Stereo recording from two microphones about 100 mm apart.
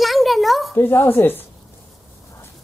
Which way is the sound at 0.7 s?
20° left (ahead or behind).